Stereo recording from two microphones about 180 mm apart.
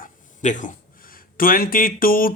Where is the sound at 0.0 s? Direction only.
45° left (ahead or behind).